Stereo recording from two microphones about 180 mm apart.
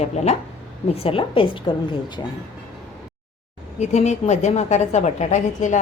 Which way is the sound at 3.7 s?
40° left (ahead or behind).